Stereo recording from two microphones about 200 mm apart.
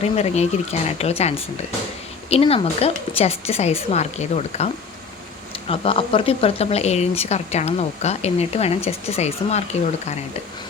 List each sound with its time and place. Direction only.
0.0 s speech: 30° left (ahead or behind)